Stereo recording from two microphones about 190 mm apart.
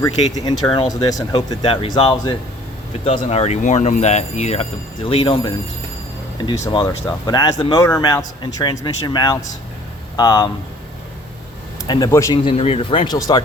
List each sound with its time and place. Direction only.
0.4 s a man's voice: 25° left (ahead or behind)
6.4 s a man's voice: 25° left (ahead or behind)
11.9 s a man's voice: 20° left (ahead or behind)